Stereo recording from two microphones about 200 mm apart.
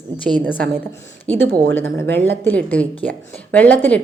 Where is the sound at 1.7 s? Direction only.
10° left (ahead or behind).